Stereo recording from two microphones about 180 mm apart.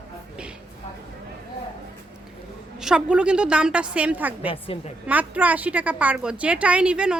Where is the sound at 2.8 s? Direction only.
5° right (ahead or behind).